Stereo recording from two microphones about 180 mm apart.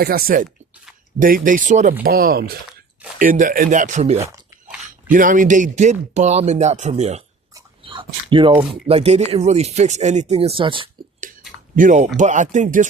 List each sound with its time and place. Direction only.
0.0 s speech: 55° right (ahead or behind)
2.0 s speech: 55° right (ahead or behind); by 7.2 s 40° right (ahead or behind)
7.5 s dog: 25° right (ahead or behind)
8.9 s speech: 35° right (ahead or behind)
11.8 s speech: 45° right (ahead or behind)